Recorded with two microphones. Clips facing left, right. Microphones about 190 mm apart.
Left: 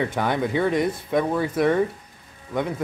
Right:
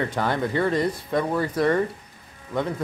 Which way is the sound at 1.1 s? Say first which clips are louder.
Left 2 dB; 5° left (ahead or behind).